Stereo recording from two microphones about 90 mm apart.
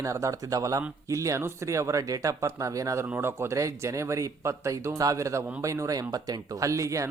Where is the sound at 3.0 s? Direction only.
25° right (ahead or behind).